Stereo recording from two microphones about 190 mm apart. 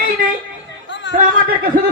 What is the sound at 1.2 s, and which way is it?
Speech, 50° right (ahead or behind).